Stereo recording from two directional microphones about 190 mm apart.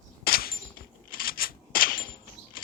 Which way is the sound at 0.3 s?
50° left (ahead or behind).